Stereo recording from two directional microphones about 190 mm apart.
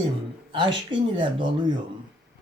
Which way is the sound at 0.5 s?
25° right (ahead or behind).